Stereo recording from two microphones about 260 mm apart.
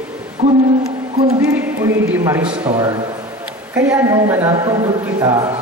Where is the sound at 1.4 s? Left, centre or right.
Centre.